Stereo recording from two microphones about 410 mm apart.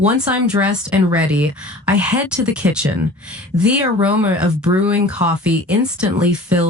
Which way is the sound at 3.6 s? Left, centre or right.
Centre.